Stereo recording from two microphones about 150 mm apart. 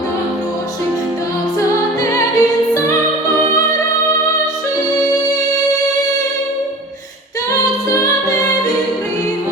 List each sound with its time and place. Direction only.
2.0 s music: 20° left (ahead or behind)